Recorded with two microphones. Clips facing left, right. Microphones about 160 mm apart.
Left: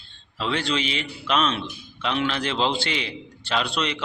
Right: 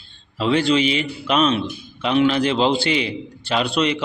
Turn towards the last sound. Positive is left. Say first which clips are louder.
# right 6 dB
turn(degrees=-10)  # may be behind; listen again after turning